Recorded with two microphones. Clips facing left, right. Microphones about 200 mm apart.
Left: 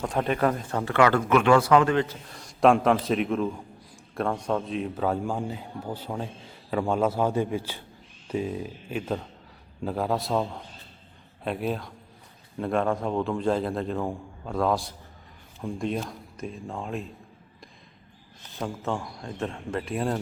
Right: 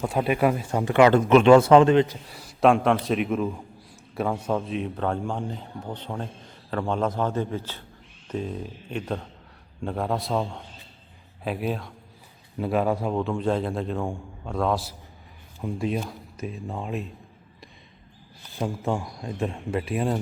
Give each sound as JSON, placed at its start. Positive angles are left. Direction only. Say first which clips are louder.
{"t": 0.0, "sound": "speech", "louder": "right 2 dB", "side_deg": -10}
{"t": 2.3, "sound": "a man's voice", "louder": "even", "side_deg": -5}
{"t": 18.6, "sound": "speech", "louder": "right 3 dB", "side_deg": -10}